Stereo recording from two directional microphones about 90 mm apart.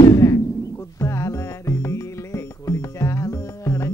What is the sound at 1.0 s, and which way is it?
Music, 30° left (ahead or behind).